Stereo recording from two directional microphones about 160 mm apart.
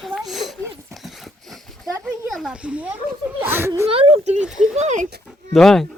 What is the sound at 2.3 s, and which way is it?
A child's voice, centre (ahead or behind).